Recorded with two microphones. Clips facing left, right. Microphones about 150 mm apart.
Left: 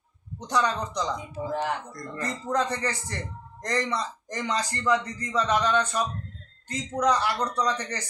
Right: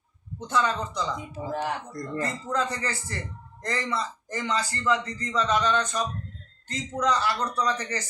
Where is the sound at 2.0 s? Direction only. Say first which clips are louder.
Right 4 dB; 30° right (ahead or behind).